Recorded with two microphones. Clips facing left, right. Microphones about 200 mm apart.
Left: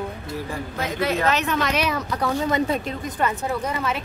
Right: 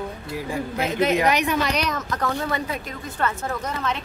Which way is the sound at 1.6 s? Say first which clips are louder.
Left 1 dB; 5° left (ahead or behind).